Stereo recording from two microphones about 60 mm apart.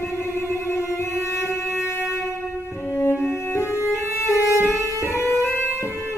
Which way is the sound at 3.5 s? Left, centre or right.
Left.